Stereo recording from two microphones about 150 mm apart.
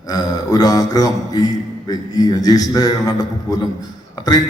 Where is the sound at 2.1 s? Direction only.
25° left (ahead or behind).